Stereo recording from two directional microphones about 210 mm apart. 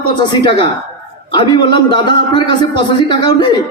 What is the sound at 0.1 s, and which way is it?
A man's voice, 20° left (ahead or behind).